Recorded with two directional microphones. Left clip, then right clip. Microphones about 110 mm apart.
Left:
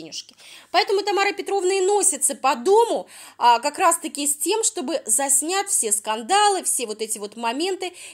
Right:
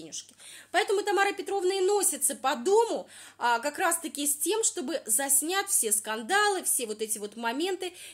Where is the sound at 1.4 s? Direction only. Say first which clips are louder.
Left 6 dB; 55° left (ahead or behind).